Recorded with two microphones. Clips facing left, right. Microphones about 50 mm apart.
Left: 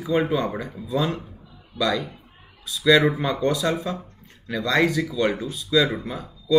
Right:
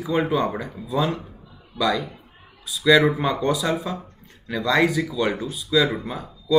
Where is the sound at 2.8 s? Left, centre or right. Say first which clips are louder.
Right 1 dB; centre.